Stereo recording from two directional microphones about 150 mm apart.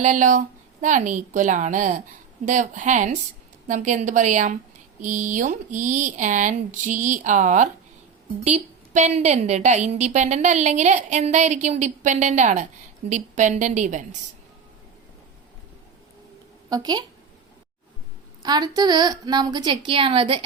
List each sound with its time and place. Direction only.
0.0 s a woman's voice: 55° right (ahead or behind)
16.6 s a woman's voice: 25° right (ahead or behind)
18.4 s a woman's voice: 25° right (ahead or behind)